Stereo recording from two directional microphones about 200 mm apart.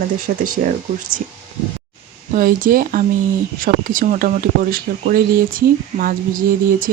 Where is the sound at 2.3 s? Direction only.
45° right (ahead or behind).